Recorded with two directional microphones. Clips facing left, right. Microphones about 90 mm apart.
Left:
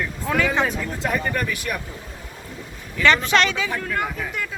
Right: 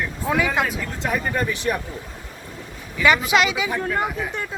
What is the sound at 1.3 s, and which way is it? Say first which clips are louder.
Speech: right 3 dB; 25° right (ahead or behind).